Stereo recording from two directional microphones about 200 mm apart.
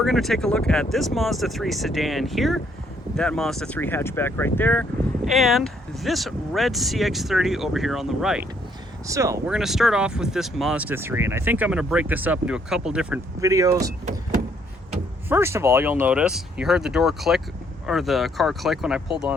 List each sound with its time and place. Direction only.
0.0 s speech: centre (ahead or behind)
9.0 s speech: 15° right (ahead or behind)
9.5 s speech: centre (ahead or behind)
13.4 s speech: 15° right (ahead or behind)
15.3 s speech: 10° right (ahead or behind)